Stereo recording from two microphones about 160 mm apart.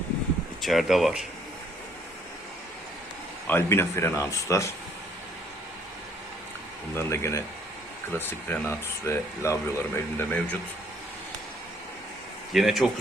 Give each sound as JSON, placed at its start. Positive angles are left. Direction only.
{"t": 0.6, "sound": "speech", "side_deg": 0}
{"t": 3.4, "sound": "speech", "side_deg": 15}
{"t": 6.9, "sound": "speech", "side_deg": 15}
{"t": 12.5, "sound": "speech", "side_deg": 0}